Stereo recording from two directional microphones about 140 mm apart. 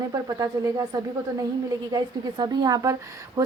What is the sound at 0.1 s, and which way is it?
A woman's voice, 25° right (ahead or behind).